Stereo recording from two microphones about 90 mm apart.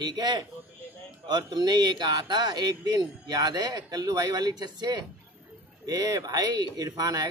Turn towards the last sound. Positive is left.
turn(degrees=-45)  # may be behind; listen again after turning